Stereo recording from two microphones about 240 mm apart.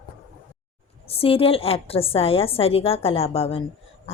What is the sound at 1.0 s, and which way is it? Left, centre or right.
A woman's voice, left.